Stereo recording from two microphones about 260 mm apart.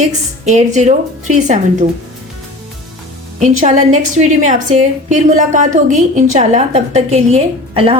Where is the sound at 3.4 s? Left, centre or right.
Right.